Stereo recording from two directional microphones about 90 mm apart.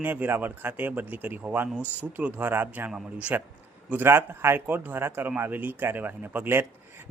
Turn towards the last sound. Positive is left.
turn(degrees=-25)  # may be behind; listen again after turning